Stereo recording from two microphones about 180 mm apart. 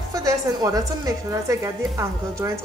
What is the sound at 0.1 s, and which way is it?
A woman's voice, 20° right (ahead or behind).